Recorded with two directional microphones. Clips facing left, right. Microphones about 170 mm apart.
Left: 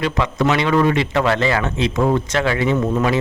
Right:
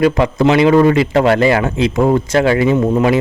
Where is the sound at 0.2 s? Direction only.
30° right (ahead or behind).